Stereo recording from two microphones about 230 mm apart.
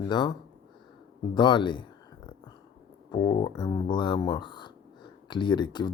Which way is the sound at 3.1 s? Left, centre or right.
Centre.